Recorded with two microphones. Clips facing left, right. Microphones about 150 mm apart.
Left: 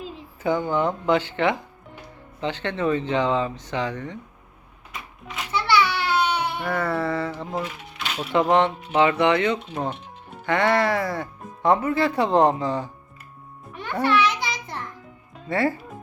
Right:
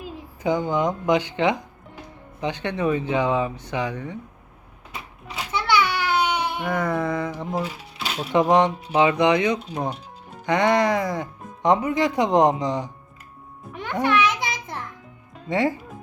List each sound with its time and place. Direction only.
0.0 s a woman's voice: 15° right (ahead or behind)
5.4 s a sound: 15° right (ahead or behind)
7.6 s speech: 30° right (ahead or behind)
8.3 s speech: 15° right (ahead or behind)
13.7 s music: 15° right (ahead or behind)
15.4 s speech: 15° right (ahead or behind)